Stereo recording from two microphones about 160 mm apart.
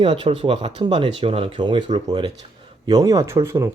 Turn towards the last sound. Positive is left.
turn(degrees=-15)  # may be behind; listen again after turning